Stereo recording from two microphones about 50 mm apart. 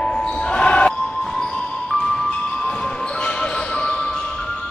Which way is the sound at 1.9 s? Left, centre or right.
Centre.